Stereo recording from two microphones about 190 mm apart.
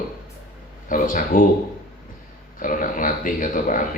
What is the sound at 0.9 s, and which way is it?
Speech, 45° left (ahead or behind).